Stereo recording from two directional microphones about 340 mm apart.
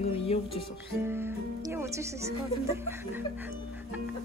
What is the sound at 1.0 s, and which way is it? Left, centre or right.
Speech, centre.